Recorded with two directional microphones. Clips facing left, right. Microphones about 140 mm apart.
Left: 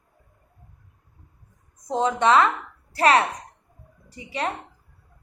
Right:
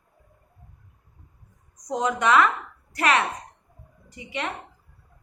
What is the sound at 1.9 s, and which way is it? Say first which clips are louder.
A woman's voice: left 2 dB; 30° left (ahead or behind).